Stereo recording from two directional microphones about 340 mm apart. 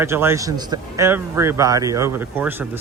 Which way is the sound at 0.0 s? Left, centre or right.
Centre.